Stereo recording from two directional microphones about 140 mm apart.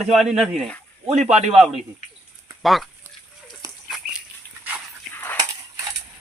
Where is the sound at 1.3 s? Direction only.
50° right (ahead or behind).